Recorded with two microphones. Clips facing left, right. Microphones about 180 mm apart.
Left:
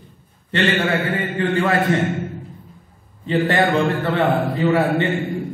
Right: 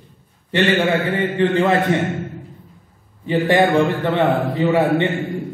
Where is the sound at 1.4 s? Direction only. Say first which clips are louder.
Right 3 dB; 20° right (ahead or behind).